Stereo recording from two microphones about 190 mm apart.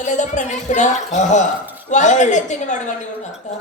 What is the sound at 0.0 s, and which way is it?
Speech, 40° left (ahead or behind).